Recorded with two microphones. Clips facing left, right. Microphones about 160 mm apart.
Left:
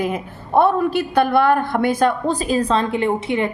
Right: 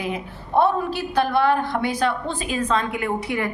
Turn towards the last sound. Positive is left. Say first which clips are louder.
# left 5 dB
turn(degrees=25)  # may be behind; listen again after turning